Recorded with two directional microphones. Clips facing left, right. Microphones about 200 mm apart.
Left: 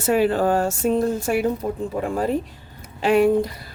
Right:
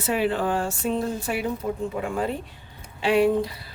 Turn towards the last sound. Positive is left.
turn(degrees=45)  # may be behind; listen again after turning